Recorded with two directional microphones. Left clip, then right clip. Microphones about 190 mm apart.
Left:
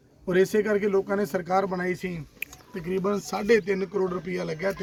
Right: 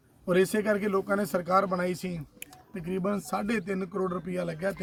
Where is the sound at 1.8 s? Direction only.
15° right (ahead or behind).